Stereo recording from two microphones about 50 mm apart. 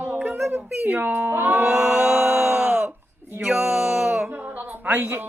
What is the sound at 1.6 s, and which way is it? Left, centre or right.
Music, right.